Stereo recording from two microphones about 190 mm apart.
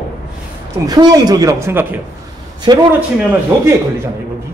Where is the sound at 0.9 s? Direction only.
20° right (ahead or behind).